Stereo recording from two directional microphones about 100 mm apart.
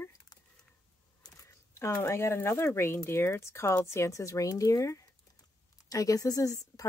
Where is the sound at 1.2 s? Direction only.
30° left (ahead or behind).